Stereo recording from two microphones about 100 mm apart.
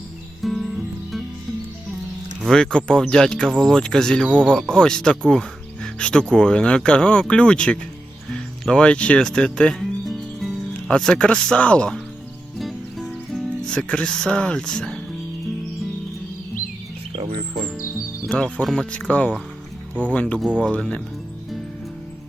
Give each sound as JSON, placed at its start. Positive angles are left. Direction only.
{"t": 0.4, "sound": "music", "side_deg": 0}
{"t": 2.5, "sound": "speech", "side_deg": 10}
{"t": 12.5, "sound": "music", "side_deg": 0}
{"t": 17.1, "sound": "music", "side_deg": -75}
{"t": 18.3, "sound": "speech", "side_deg": 15}